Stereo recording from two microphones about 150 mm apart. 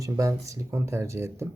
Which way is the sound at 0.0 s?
20° right (ahead or behind).